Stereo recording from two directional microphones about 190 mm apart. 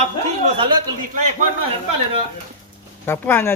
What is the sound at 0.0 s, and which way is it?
Speech, 35° right (ahead or behind).